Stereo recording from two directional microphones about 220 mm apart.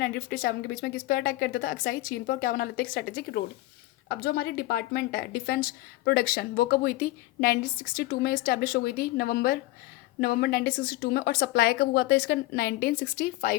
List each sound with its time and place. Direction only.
0.0 s a woman's voice: 45° left (ahead or behind)